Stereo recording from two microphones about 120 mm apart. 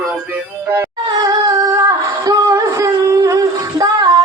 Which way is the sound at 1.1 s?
35° right (ahead or behind).